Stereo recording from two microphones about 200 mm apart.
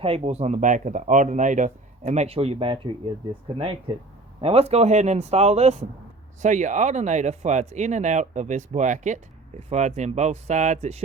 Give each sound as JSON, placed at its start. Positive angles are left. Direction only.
{"t": 0.0, "sound": "speech", "side_deg": -30}